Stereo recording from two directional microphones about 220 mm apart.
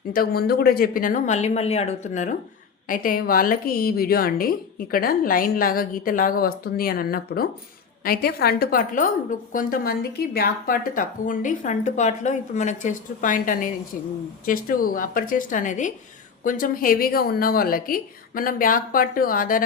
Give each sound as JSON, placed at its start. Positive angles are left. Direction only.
{"t": 0.1, "sound": "a woman's voice", "side_deg": 45}